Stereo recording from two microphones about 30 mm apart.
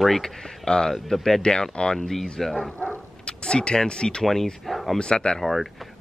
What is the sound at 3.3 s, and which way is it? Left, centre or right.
Speech, left.